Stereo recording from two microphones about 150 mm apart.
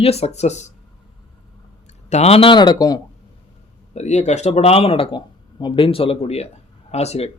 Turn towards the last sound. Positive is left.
turn(degrees=45)  # may be behind; listen again after turning